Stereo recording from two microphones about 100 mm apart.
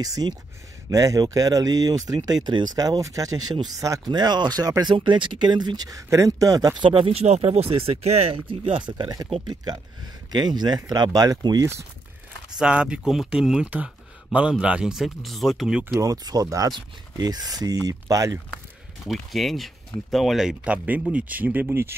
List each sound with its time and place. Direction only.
0.0 s speech: 40° right (ahead or behind)
4.9 s speech: 55° right (ahead or behind); by 6.7 s 35° right (ahead or behind)
6.8 s speech: 60° right (ahead or behind); by 11.6 s 40° right (ahead or behind)
12.5 s speech: 10° right (ahead or behind)
15.8 s speech: 25° right (ahead or behind)
16.1 s speech: 40° right (ahead or behind)
19.0 s speech: centre (ahead or behind); by 21.9 s 20° right (ahead or behind)